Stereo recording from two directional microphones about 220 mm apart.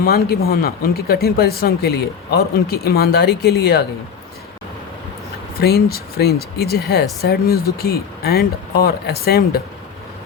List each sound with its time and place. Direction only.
0.0 s speech: 45° left (ahead or behind)
5.5 s speech: 45° left (ahead or behind)